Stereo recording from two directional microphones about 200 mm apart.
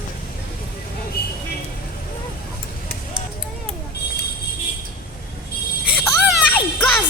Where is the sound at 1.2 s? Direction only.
50° left (ahead or behind).